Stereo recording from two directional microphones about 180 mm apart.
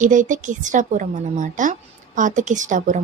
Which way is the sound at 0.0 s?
45° right (ahead or behind).